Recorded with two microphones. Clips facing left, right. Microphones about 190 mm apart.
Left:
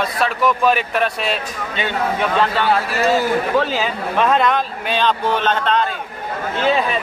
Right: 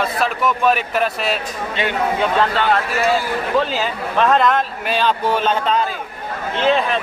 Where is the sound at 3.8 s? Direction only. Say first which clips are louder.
Even; centre (ahead or behind).